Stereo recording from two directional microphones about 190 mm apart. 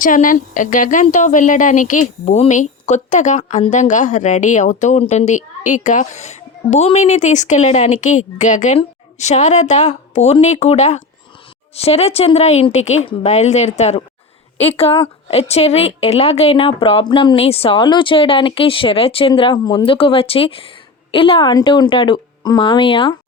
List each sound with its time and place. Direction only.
0.0 s a woman's voice: 45° left (ahead or behind); by 23.1 s 25° left (ahead or behind)